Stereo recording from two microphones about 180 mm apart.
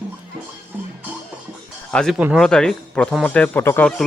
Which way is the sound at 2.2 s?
Centre (ahead or behind).